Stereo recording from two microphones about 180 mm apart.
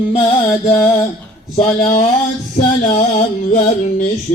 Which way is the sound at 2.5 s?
45° left (ahead or behind).